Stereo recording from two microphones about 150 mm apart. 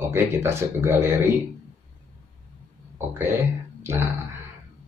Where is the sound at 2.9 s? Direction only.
20° right (ahead or behind).